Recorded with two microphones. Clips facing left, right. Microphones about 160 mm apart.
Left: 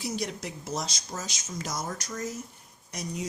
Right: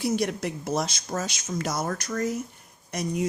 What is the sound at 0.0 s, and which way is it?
Speech, 60° right (ahead or behind).